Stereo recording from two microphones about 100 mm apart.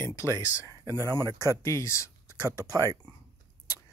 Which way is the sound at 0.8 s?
30° right (ahead or behind).